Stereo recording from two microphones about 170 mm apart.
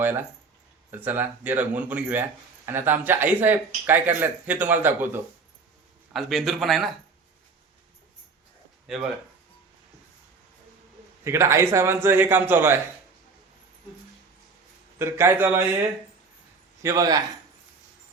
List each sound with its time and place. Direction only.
0.0 s a man's voice: 10° right (ahead or behind)
6.1 s speech: centre (ahead or behind)
11.2 s a man's voice: 15° right (ahead or behind)
14.9 s a man's voice: 15° right (ahead or behind)
16.8 s a man's voice: 20° right (ahead or behind)